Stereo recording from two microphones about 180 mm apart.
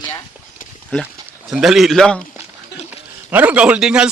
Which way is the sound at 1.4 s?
Centre (ahead or behind).